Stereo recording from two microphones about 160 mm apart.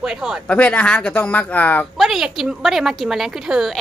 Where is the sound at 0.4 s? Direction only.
10° left (ahead or behind).